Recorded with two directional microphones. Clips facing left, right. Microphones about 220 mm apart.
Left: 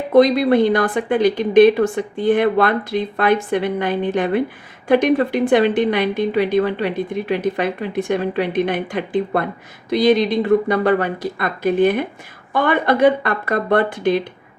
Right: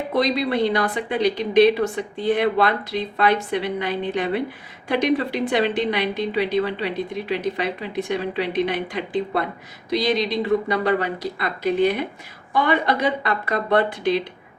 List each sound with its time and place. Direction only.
0.1 s a woman's voice: 50° left (ahead or behind)